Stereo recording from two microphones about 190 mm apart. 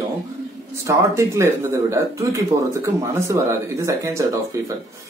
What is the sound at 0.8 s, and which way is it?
A man's voice, 15° right (ahead or behind).